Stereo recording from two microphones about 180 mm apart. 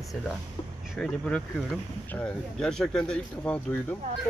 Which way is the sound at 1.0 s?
5° left (ahead or behind).